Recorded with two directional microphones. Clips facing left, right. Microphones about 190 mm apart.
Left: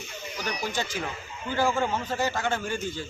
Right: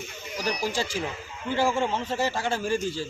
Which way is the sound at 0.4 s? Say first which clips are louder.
Right 3 dB; 35° right (ahead or behind).